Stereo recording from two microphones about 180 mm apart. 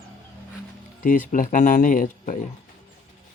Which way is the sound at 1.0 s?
50° left (ahead or behind).